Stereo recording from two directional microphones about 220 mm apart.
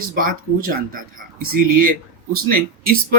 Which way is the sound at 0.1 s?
40° right (ahead or behind).